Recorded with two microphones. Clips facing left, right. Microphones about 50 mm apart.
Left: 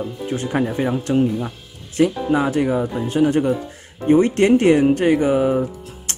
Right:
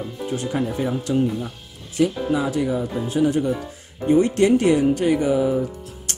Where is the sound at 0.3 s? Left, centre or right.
Left.